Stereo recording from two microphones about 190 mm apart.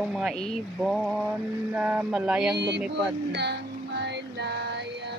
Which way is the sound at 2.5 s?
65° right (ahead or behind).